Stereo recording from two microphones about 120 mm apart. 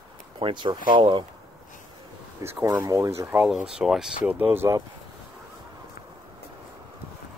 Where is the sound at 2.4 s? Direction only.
20° right (ahead or behind).